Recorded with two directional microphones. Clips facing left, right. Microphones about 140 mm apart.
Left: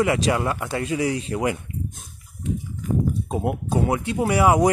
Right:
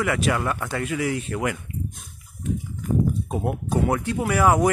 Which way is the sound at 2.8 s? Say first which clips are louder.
Even; 50° right (ahead or behind).